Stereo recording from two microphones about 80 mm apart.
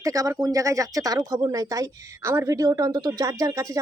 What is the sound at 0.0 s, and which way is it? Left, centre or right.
A woman's voice, right.